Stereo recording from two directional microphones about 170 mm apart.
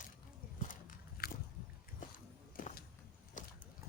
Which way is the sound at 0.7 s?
55° left (ahead or behind).